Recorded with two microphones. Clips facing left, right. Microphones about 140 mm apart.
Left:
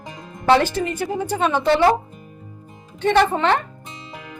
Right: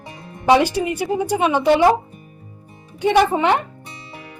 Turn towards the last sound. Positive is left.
turn(degrees=-10)  # may be behind; listen again after turning